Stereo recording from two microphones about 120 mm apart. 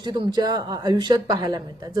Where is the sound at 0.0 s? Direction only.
35° right (ahead or behind).